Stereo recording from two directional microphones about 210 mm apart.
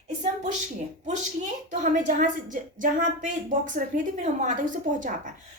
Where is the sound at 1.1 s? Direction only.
35° right (ahead or behind).